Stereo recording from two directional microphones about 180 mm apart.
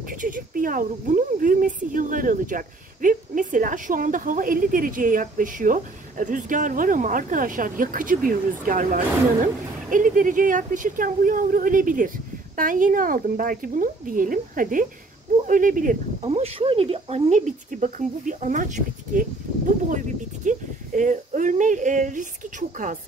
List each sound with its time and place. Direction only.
0.2 s speech: 50° right (ahead or behind)
16.3 s speech: 30° right (ahead or behind)